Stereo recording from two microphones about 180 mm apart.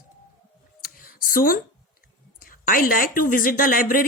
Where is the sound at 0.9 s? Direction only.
50° left (ahead or behind).